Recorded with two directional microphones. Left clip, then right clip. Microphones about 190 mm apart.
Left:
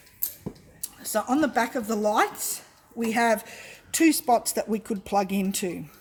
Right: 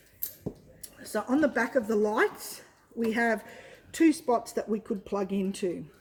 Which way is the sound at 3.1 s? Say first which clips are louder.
Left 5 dB; 55° left (ahead or behind).